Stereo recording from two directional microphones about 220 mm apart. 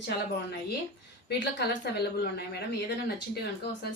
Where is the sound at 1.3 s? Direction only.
50° left (ahead or behind).